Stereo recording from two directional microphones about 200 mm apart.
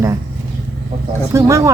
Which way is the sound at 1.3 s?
15° right (ahead or behind).